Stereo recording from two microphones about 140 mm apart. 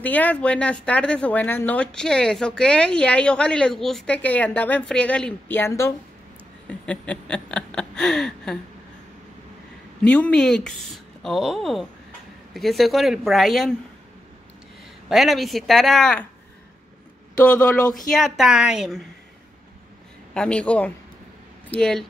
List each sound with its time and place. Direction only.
0.0 s speech: 10° left (ahead or behind)
6.7 s speech: 10° left (ahead or behind)
10.0 s speech: 10° left (ahead or behind)
15.0 s speech: centre (ahead or behind)
17.4 s speech: 5° left (ahead or behind)
20.3 s speech: 10° left (ahead or behind)